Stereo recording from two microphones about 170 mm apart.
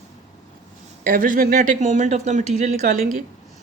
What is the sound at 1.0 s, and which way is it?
Speech, 55° right (ahead or behind).